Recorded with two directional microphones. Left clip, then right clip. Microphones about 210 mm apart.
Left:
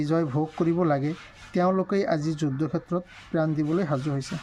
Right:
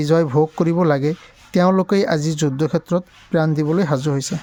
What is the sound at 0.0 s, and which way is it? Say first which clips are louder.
Speech: right 10 dB; 55° right (ahead or behind).